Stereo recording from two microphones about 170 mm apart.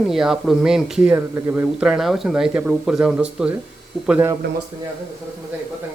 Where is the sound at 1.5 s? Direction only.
5° right (ahead or behind).